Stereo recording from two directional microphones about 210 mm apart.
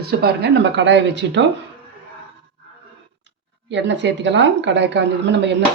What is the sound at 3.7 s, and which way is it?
Speech, 60° right (ahead or behind).